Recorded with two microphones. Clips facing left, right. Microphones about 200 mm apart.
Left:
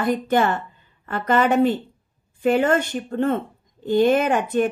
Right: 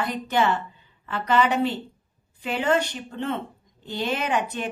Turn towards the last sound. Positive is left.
turn(degrees=50)  # may be behind; listen again after turning